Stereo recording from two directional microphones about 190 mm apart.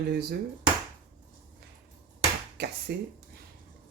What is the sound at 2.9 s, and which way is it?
Speech, 55° right (ahead or behind).